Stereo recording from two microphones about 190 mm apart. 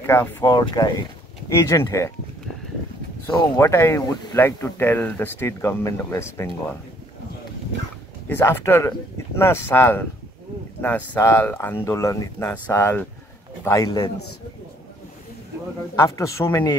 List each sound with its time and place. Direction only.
0.0 s speech: 10° left (ahead or behind)
3.3 s speech: 10° left (ahead or behind)
8.3 s speech: 10° left (ahead or behind)
16.0 s speech: 15° left (ahead or behind)